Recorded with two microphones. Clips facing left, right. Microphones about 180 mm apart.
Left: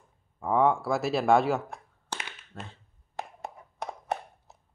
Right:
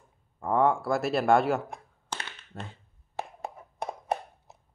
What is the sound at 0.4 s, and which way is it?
Speech, centre (ahead or behind).